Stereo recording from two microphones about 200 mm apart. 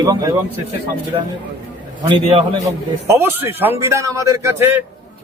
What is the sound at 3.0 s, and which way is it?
A man's voice, 10° right (ahead or behind).